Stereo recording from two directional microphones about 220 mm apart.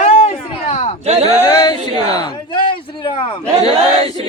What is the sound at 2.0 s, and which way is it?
A man's voice, 20° left (ahead or behind).